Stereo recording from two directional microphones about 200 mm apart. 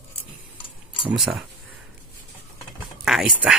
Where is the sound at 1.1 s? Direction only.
5° right (ahead or behind).